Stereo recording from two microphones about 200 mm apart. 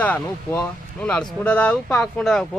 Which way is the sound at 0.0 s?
5° left (ahead or behind).